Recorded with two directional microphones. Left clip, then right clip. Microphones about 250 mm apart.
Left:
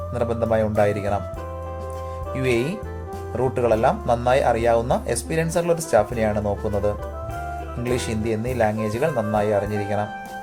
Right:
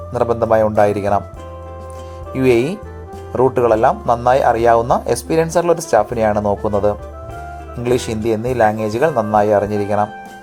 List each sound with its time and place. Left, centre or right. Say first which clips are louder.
0.1 s speech: right 8 dB; centre
2.4 s speech: right 9 dB; centre
6.6 s speech: right 7 dB; centre
7.9 s speech: right 8 dB; centre